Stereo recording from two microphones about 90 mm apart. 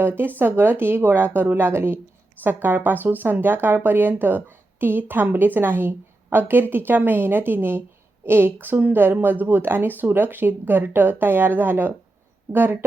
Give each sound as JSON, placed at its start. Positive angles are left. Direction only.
{"t": 0.0, "sound": "a woman's voice", "side_deg": -25}